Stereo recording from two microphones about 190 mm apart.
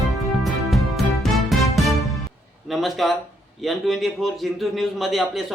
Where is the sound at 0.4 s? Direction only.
Centre (ahead or behind).